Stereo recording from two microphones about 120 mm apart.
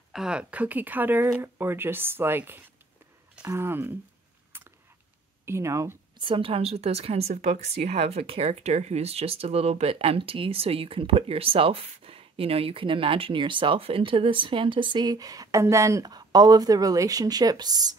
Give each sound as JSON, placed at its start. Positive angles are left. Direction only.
{"t": 0.1, "sound": "speech", "side_deg": -5}
{"t": 4.5, "sound": "a sound", "side_deg": -20}
{"t": 5.4, "sound": "speech", "side_deg": -20}
{"t": 6.2, "sound": "speech", "side_deg": -45}